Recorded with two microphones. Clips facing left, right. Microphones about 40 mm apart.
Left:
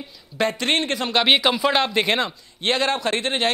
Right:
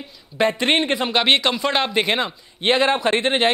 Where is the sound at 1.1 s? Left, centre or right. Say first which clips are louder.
Left 2 dB; centre.